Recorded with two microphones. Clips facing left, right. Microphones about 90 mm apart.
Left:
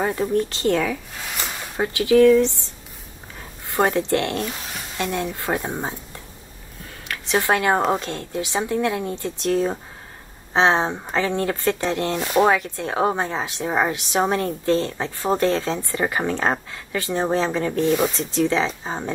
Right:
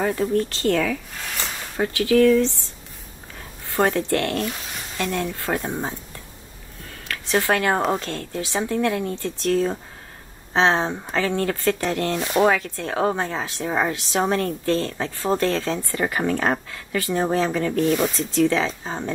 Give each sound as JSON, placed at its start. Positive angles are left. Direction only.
{"t": 0.0, "sound": "a woman's voice", "side_deg": 20}
{"t": 3.6, "sound": "a woman's voice", "side_deg": 20}
{"t": 7.1, "sound": "a woman's voice", "side_deg": 20}
{"t": 12.2, "sound": "rub", "side_deg": 5}
{"t": 12.4, "sound": "a woman's voice", "side_deg": 20}